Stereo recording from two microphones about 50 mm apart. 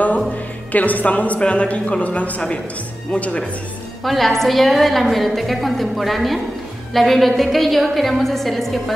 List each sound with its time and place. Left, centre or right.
0.7 s a woman's voice: left
4.0 s a woman's voice: centre